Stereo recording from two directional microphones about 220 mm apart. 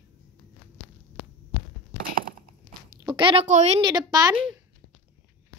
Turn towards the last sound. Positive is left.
turn(degrees=-20)  # may be behind; listen again after turning